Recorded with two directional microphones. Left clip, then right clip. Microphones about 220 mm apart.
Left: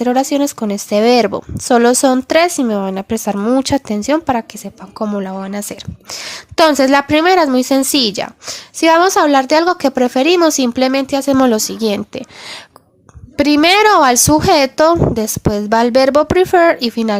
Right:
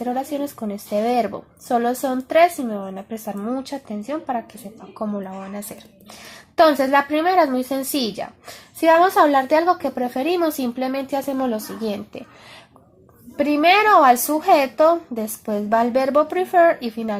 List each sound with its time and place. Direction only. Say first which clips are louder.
0.0 s a woman's voice: left 10 dB; 35° left (ahead or behind)
11.3 s a woman's voice: left 11 dB; 40° left (ahead or behind)